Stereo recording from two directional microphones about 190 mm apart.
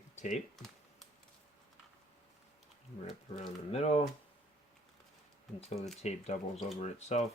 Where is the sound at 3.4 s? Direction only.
35° left (ahead or behind).